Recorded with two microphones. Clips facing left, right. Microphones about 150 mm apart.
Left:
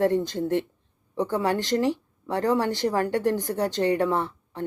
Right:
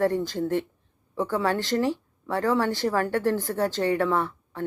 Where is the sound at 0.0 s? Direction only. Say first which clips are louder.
Left 1 dB; 20° left (ahead or behind).